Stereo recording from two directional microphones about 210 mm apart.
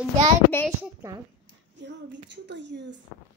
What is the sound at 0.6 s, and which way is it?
Speech, 5° right (ahead or behind).